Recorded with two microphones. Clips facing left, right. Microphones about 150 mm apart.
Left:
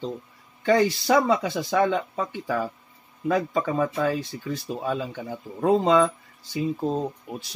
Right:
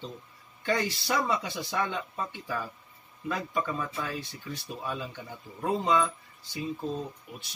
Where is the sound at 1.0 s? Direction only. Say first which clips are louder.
Left 8 dB; 90° left.